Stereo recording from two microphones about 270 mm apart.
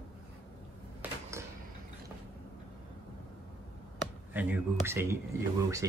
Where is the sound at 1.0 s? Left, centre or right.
Centre.